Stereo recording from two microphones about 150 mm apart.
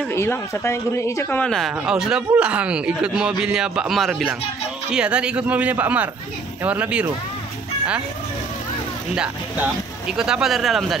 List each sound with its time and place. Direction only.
0.1 s a woman's voice: 15° left (ahead or behind)
1.4 s a man's voice: centre (ahead or behind)
9.1 s a man's voice: 5° right (ahead or behind)